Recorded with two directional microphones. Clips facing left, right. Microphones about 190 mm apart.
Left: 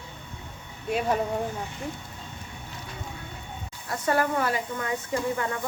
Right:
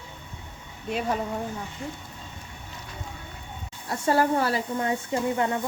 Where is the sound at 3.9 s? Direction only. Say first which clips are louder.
Right 3 dB; 30° right (ahead or behind).